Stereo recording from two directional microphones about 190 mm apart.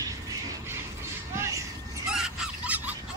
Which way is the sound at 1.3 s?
15° right (ahead or behind).